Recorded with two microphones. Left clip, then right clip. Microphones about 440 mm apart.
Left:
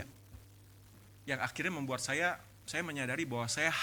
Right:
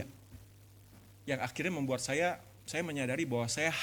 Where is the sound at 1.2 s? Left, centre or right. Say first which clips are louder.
Even; left.